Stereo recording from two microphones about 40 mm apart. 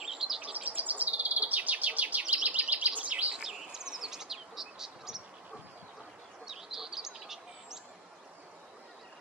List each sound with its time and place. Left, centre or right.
0.0 s bird: centre
0.4 s bird: right
3.3 s insect: centre
6.4 s bird: centre